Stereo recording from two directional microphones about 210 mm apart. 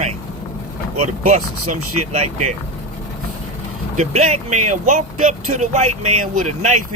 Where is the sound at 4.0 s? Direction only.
30° right (ahead or behind).